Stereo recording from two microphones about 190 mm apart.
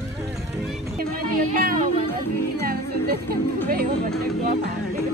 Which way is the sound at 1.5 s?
45° right (ahead or behind).